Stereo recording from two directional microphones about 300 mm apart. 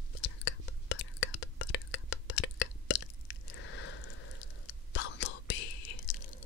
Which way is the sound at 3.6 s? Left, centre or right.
Left.